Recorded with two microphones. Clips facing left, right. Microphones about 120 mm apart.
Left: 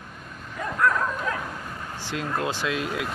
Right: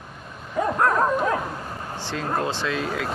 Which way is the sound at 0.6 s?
40° right (ahead or behind).